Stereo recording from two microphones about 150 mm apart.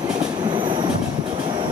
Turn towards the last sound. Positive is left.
turn(degrees=-30)  # may be behind; listen again after turning